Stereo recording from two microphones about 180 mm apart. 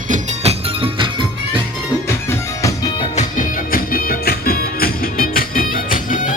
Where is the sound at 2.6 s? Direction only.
15° left (ahead or behind).